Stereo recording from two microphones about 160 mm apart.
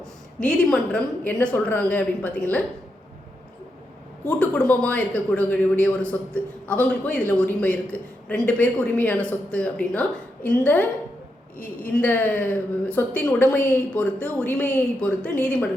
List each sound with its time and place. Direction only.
0.0 s a woman's voice: 5° left (ahead or behind)
4.3 s a woman's voice: 10° left (ahead or behind)
11.5 s a woman's voice: 60° left (ahead or behind)
11.9 s a woman's voice: 10° left (ahead or behind)